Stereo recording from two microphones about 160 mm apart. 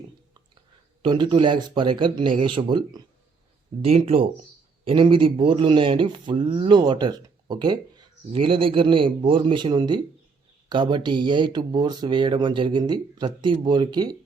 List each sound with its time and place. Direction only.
1.0 s speech: 30° right (ahead or behind)